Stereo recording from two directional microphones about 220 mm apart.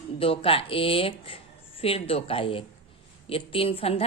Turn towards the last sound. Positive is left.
turn(degrees=25)  # may be behind; listen again after turning